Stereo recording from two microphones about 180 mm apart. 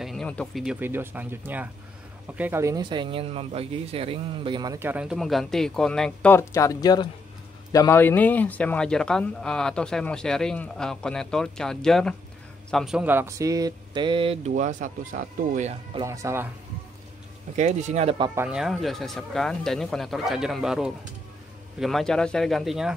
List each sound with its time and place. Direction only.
0.0 s a sound: 5° left (ahead or behind)
0.7 s speech: 10° right (ahead or behind)
4.7 s speech: 10° right (ahead or behind); by 14.5 s 30° right (ahead or behind)
14.5 s speech: 45° right (ahead or behind)
16.0 s speech: 15° right (ahead or behind)
17.6 s speech: 40° right (ahead or behind)
18.3 s speech: 5° right (ahead or behind)